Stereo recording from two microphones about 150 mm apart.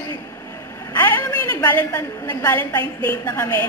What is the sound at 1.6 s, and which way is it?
A woman's voice, 15° left (ahead or behind).